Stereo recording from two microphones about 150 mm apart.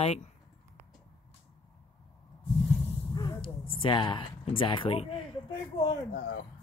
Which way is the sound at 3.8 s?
35° left (ahead or behind).